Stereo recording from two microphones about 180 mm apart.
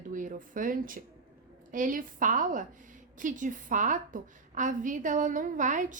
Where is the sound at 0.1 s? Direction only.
45° right (ahead or behind).